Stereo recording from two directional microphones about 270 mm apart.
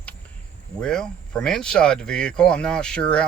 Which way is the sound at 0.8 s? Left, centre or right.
Centre.